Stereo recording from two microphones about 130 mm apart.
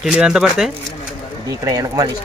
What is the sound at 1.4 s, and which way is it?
Speech, 25° right (ahead or behind).